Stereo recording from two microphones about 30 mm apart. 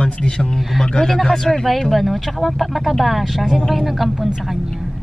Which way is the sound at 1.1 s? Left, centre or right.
Centre.